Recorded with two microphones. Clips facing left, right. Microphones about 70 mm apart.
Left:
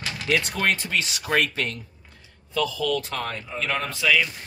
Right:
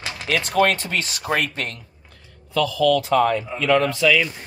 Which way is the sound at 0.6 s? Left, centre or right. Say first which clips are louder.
Right 10 dB; right.